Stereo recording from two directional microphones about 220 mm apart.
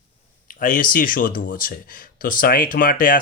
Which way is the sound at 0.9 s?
40° left (ahead or behind).